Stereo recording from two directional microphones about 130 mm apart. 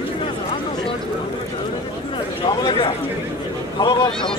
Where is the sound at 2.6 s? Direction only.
40° left (ahead or behind).